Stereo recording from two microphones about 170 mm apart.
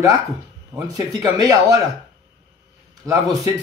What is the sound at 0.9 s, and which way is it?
Speech, 20° right (ahead or behind).